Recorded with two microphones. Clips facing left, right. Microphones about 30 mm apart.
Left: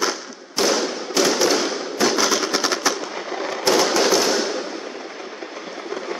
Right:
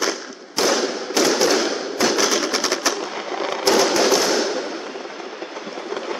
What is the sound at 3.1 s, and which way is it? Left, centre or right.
Fireworks, right.